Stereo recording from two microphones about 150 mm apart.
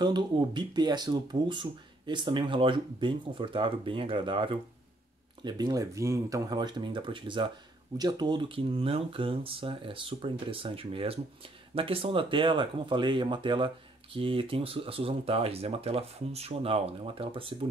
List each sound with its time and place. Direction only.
0.0 s speech: 30° right (ahead or behind)